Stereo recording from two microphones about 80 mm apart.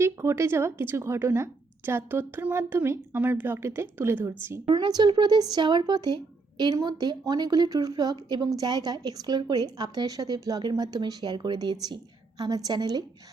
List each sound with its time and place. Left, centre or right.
0.0 s a woman's voice: right
4.7 s a woman's voice: right
12.4 s a woman's voice: right